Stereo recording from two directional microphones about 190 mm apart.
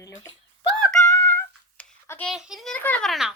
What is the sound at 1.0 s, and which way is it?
Music, 15° left (ahead or behind).